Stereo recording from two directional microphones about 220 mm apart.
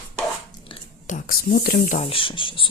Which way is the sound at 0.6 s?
25° left (ahead or behind).